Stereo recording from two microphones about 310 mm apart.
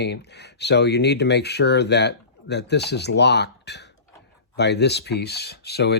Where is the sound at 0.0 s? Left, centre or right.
Left.